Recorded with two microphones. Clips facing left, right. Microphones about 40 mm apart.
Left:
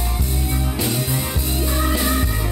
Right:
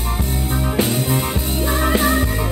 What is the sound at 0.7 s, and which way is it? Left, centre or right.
Music, right.